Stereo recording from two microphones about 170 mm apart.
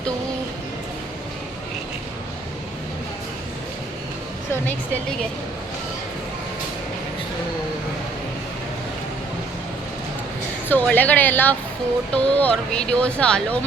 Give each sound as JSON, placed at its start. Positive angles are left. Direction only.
{"t": 10.7, "sound": "speech", "side_deg": 10}